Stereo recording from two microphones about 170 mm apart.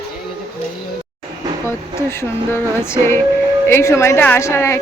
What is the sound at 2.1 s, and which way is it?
A woman's voice, 15° left (ahead or behind).